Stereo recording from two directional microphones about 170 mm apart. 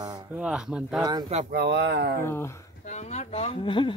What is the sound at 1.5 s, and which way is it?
Speech, 75° right (ahead or behind).